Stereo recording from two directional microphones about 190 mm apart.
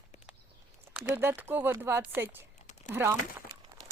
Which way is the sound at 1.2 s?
10° right (ahead or behind).